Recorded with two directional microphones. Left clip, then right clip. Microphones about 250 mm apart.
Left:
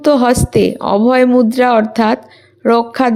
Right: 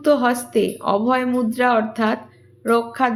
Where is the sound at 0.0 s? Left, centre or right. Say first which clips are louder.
Left 6 dB; left.